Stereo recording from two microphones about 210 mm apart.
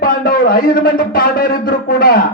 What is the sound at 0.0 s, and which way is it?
Speech, 45° left (ahead or behind).